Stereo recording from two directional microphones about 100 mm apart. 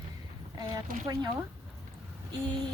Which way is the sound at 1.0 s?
40° right (ahead or behind).